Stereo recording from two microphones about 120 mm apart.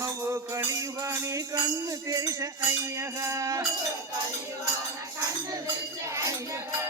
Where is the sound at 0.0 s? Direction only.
25° right (ahead or behind).